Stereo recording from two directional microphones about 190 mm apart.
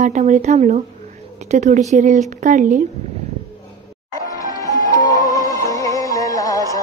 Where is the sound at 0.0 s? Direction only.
40° right (ahead or behind).